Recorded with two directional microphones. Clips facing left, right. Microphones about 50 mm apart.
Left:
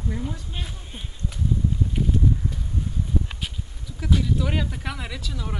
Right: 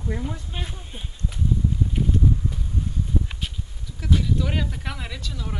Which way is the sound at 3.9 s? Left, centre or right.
Centre.